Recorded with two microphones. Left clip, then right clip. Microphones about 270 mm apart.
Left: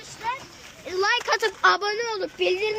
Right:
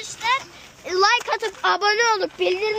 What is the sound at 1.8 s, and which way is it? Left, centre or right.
Speech, right.